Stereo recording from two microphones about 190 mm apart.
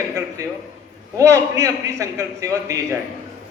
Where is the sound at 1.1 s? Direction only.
15° right (ahead or behind).